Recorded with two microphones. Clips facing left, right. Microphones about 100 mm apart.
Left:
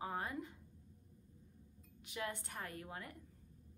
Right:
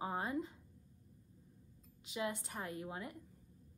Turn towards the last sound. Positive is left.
turn(degrees=-20)  # may be behind; listen again after turning